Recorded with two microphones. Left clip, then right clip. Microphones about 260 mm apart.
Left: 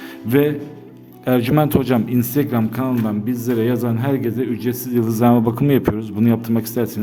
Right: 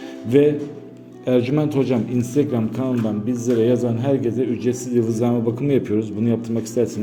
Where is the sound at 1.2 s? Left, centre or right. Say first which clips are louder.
Left 2 dB; left.